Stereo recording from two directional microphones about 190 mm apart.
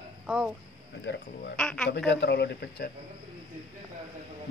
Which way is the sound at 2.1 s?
65° left (ahead or behind).